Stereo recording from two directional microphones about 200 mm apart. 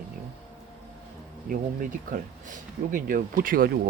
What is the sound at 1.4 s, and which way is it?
Speech, 45° right (ahead or behind).